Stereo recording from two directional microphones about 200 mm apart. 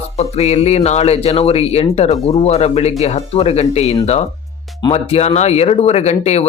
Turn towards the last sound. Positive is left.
turn(degrees=30)  # may be behind; listen again after turning